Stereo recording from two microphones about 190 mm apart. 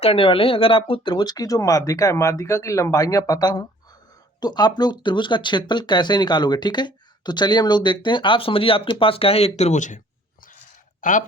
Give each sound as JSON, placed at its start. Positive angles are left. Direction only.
{"t": 0.0, "sound": "speech", "side_deg": 30}
{"t": 11.0, "sound": "speech", "side_deg": 45}